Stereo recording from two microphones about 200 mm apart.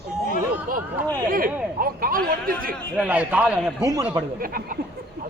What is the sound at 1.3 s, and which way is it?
Speech, 45° right (ahead or behind).